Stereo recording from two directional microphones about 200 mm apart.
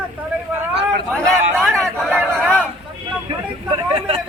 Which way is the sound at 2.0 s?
Centre (ahead or behind).